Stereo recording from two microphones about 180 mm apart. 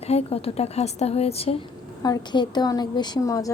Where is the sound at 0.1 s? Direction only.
35° left (ahead or behind).